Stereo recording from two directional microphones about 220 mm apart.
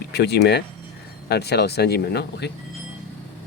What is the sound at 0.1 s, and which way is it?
Speech, 50° left (ahead or behind).